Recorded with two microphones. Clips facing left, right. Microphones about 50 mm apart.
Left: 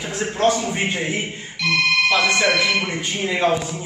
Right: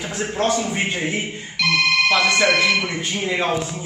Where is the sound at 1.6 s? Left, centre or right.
Right.